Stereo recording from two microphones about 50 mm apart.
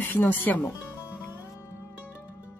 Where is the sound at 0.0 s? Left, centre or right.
Left.